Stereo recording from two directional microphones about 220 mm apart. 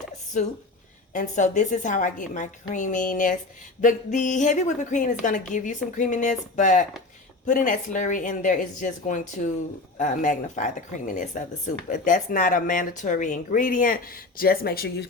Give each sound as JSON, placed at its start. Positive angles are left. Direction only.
{"t": 1.1, "sound": "speech", "side_deg": 35}